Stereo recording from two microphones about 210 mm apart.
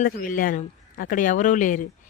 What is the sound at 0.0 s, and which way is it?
Speech, 40° left (ahead or behind).